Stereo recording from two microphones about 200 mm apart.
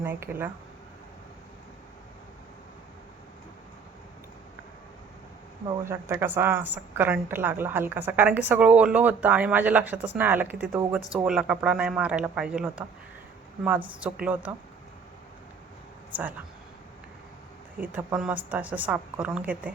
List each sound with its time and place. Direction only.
0.0 s a woman's voice: 10° right (ahead or behind)
5.9 s a woman's voice: 10° right (ahead or behind)
14.0 s a woman's voice: 5° right (ahead or behind)
17.7 s a woman's voice: 5° right (ahead or behind)